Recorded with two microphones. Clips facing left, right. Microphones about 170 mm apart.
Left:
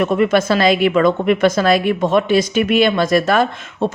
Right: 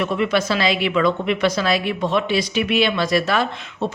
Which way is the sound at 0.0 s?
45° left (ahead or behind).